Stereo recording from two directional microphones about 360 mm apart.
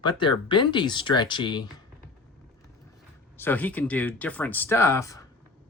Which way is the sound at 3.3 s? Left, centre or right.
Centre.